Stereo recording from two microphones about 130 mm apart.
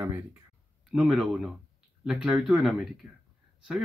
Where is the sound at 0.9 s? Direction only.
5° right (ahead or behind).